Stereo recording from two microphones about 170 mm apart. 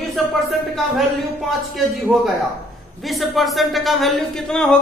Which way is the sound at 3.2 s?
Centre (ahead or behind).